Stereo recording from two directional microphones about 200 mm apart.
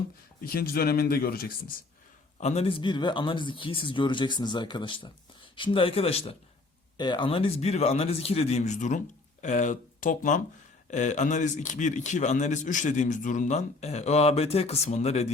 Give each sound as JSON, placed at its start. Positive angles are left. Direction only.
{"t": 0.4, "sound": "speech", "side_deg": 50}
{"t": 2.4, "sound": "a man's voice", "side_deg": 30}